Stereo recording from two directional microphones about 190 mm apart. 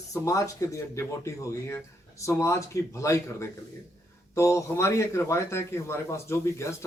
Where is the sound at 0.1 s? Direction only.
15° left (ahead or behind).